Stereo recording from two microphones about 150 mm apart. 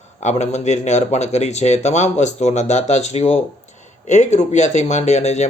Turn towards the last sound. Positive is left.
turn(degrees=50)  # may be behind; listen again after turning